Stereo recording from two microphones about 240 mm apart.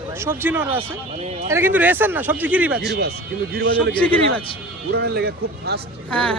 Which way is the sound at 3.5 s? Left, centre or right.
Right.